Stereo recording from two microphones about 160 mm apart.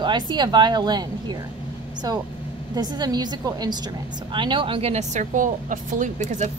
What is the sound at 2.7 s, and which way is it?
A woman's voice, 25° right (ahead or behind).